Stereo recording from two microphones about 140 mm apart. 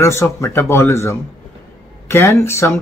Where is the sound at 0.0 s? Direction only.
20° left (ahead or behind).